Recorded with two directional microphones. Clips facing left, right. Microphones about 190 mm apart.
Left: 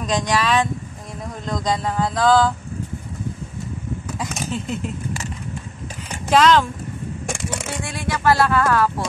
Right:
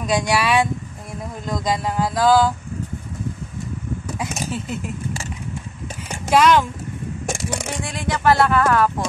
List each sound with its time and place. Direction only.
0.0 s speech: 10° right (ahead or behind)
4.2 s speech: 10° right (ahead or behind)
6.3 s speech: 10° right (ahead or behind)